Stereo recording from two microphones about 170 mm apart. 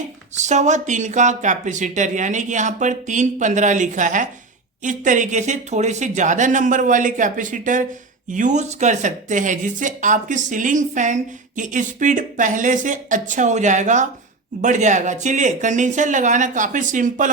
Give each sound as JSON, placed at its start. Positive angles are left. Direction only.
{"t": 0.3, "sound": "speech", "side_deg": -45}